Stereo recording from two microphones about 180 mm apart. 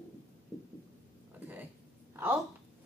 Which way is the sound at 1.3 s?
10° right (ahead or behind).